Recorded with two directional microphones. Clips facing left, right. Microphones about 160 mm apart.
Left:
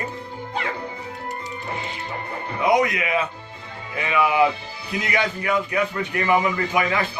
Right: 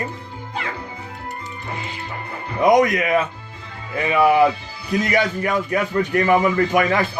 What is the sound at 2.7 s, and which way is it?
Speech, 45° right (ahead or behind).